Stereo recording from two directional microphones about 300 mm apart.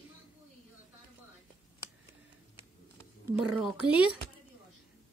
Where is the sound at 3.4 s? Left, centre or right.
Centre.